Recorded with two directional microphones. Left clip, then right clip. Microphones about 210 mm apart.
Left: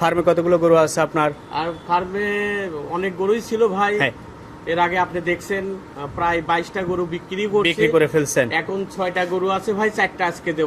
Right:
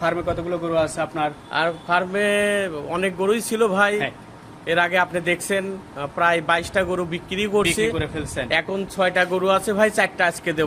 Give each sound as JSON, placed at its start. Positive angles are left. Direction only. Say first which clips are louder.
{"t": 0.0, "sound": "a man's voice", "louder": "left 6 dB", "side_deg": 35}
{"t": 1.5, "sound": "speech", "louder": "right 3 dB", "side_deg": -50}
{"t": 7.6, "sound": "a man's voice", "louder": "left 5 dB", "side_deg": 40}
{"t": 8.4, "sound": "speech", "louder": "even", "side_deg": -50}